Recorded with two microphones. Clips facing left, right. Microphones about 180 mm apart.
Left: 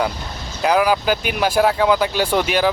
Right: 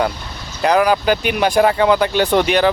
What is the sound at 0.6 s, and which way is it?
Speech, 5° left (ahead or behind).